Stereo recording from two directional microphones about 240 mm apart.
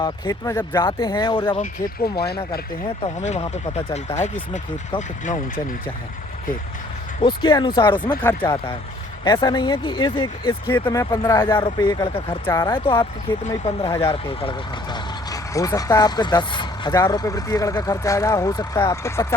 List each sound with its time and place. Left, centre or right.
0.0 s speech: centre
2.1 s speech: left
3.0 s speech: left
7.2 s speech: centre